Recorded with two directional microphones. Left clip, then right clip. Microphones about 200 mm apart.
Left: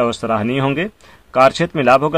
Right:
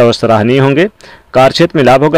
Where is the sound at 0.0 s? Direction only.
35° right (ahead or behind).